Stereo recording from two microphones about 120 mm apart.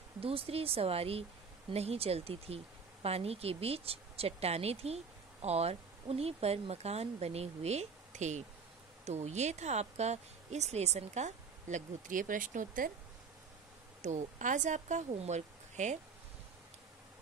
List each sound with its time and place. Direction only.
0.2 s speech: 55° right (ahead or behind); by 8.5 s 75° right (ahead or behind)
9.0 s speech: 65° right (ahead or behind); by 12.6 s 90° right
14.0 s speech: 90° right